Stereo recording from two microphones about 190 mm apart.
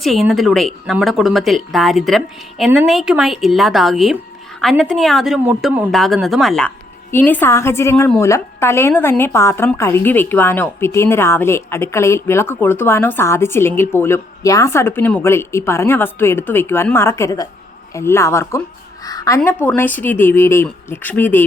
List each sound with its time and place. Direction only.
0.0 s a woman's voice: centre (ahead or behind)
19.0 s a sound: 20° left (ahead or behind)
19.6 s a woman's voice: 10° left (ahead or behind)